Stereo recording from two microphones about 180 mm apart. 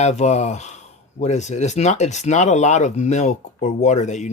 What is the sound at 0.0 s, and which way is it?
Speech, 40° left (ahead or behind).